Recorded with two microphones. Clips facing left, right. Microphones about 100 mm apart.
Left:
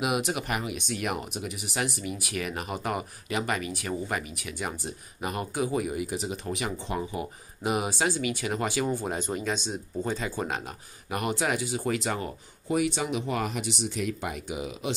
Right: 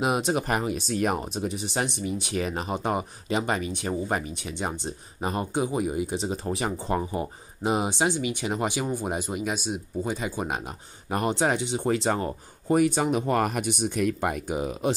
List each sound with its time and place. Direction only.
0.0 s speech: 30° right (ahead or behind)
11.1 s speech: 30° right (ahead or behind)